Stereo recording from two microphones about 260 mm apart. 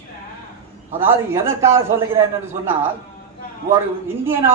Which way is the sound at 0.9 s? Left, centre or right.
Centre.